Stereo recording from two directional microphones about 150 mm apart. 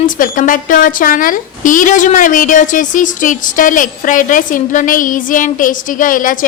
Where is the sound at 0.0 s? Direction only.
65° left (ahead or behind).